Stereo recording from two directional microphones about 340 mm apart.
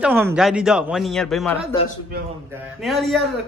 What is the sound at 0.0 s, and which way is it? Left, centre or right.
Speech, centre.